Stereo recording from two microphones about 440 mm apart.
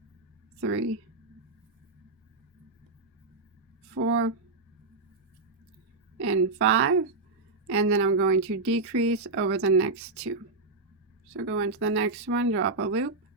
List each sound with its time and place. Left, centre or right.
3.9 s a sound: right
6.2 s speech: right
11.3 s speech: right